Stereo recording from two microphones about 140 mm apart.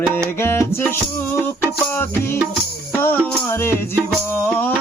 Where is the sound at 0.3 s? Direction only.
15° left (ahead or behind).